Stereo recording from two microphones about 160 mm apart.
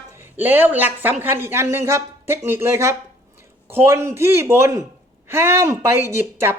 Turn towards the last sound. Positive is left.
turn(degrees=-15)  # may be behind; listen again after turning